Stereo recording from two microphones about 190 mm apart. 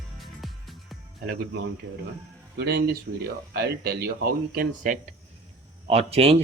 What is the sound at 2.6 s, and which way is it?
Speech, 55° right (ahead or behind).